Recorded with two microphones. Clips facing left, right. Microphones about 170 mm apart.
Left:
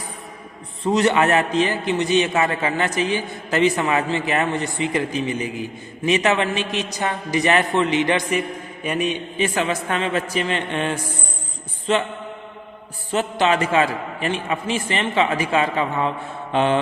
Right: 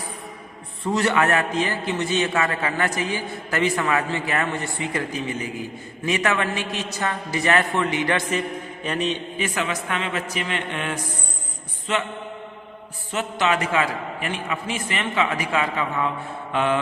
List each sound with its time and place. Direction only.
0.9 s a man's voice: 20° left (ahead or behind)
8.8 s mantra: 10° left (ahead or behind)
9.4 s a woman's voice: 30° left (ahead or behind)
13.1 s a man's voice: 30° left (ahead or behind)